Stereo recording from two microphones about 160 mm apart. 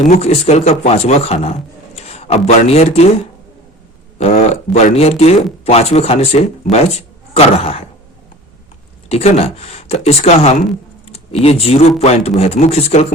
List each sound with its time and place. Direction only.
0.0 s a man's voice: 45° left (ahead or behind)
4.4 s speech: 45° left (ahead or behind)
9.0 s speech: 40° left (ahead or behind)